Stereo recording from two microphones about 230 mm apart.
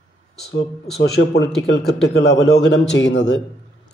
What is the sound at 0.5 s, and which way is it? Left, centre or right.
Speech, left.